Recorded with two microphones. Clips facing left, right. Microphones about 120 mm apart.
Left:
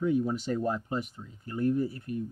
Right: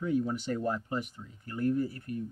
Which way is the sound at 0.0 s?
20° left (ahead or behind).